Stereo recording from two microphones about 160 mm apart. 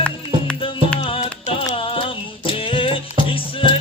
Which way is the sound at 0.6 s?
35° left (ahead or behind).